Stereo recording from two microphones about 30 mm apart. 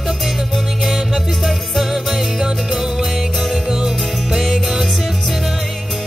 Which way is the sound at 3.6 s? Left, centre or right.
Centre.